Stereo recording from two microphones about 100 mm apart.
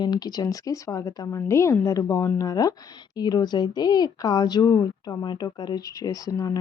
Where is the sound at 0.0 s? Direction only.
45° left (ahead or behind).